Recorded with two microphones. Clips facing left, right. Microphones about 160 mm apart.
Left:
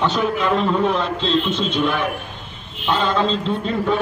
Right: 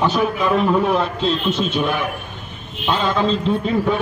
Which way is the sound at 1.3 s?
25° left (ahead or behind).